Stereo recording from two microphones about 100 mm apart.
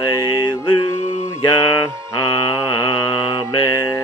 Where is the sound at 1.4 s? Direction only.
50° left (ahead or behind).